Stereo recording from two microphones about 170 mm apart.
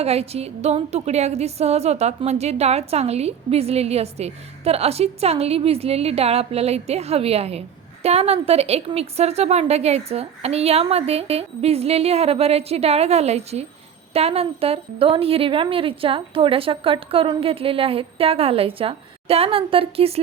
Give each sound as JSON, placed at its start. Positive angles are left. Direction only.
{"t": 0.0, "sound": "a woman's voice", "side_deg": -35}